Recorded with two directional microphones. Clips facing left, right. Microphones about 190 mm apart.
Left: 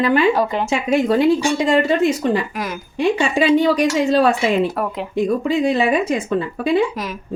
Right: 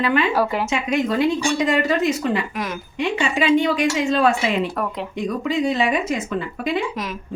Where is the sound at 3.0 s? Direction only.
35° left (ahead or behind).